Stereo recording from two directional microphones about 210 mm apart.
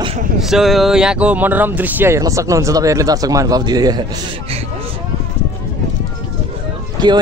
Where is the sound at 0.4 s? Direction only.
Centre (ahead or behind); by 4.6 s 25° right (ahead or behind).